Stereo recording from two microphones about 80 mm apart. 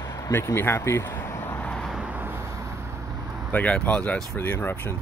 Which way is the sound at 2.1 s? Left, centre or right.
Right.